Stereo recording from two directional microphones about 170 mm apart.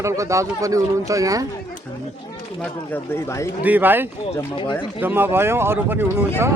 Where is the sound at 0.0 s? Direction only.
20° right (ahead or behind).